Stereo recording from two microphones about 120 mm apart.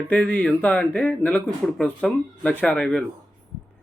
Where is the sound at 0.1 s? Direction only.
10° left (ahead or behind).